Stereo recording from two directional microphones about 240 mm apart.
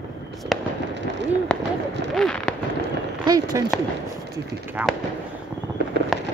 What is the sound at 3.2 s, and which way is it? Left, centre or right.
Speech, centre.